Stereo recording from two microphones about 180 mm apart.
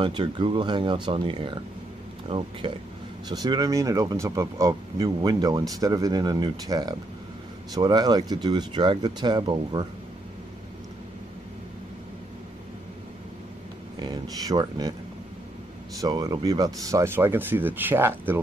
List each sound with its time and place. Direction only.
0.0 s speech: 25° right (ahead or behind)
13.9 s speech: 20° right (ahead or behind)
16.0 s speech: 20° right (ahead or behind)